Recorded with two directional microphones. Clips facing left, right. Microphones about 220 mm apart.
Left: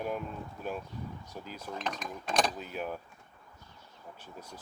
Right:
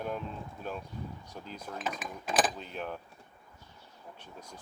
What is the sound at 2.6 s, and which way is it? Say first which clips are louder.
Speech: left 2 dB; 5° left (ahead or behind).